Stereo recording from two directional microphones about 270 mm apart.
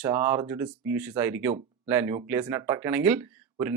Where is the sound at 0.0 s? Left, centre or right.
Centre.